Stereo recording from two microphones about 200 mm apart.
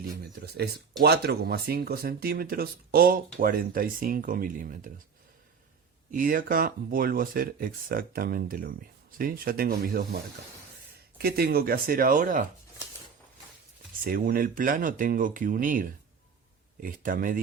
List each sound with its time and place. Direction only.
0.2 s speech: 55° right (ahead or behind)
6.1 s speech: 45° right (ahead or behind)
14.0 s speech: 45° right (ahead or behind)